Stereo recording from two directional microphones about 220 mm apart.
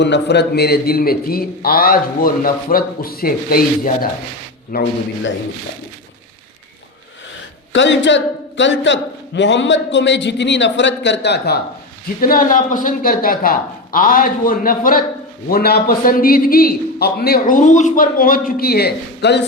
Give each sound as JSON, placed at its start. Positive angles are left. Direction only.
{"t": 0.0, "sound": "speech", "side_deg": 50}
{"t": 7.7, "sound": "a man's voice", "side_deg": 55}